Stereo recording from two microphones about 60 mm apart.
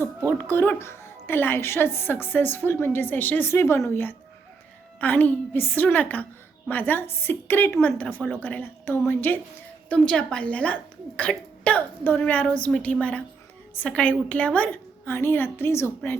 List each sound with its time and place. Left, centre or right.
0.3 s a woman's voice: left
0.8 s speech: left
4.9 s a woman's voice: left
7.0 s speech: left
7.8 s a woman's voice: left
8.6 s speech: left
9.9 s a woman's voice: centre
15.0 s speech: left